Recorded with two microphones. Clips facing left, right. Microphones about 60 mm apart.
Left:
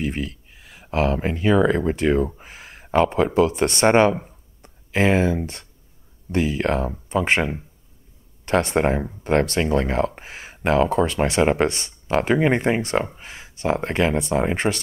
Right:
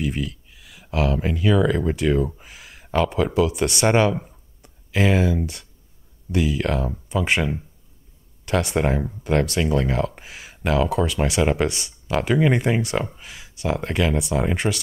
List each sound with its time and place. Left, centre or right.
0.0 s speech: left
2.4 s a sound: left
3.3 s speech: left